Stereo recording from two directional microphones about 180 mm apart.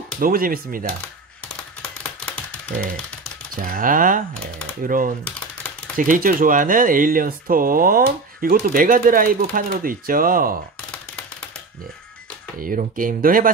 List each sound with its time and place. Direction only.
0.2 s speech: 55° right (ahead or behind)
1.6 s a sound: 5° left (ahead or behind)
3.7 s speech: 50° right (ahead or behind)
12.6 s speech: 50° right (ahead or behind)